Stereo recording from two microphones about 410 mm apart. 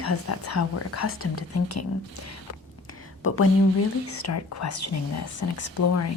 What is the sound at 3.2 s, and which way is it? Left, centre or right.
A woman's voice, left.